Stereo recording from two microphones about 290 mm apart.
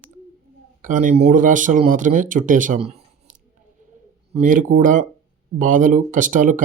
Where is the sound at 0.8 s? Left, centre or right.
Right.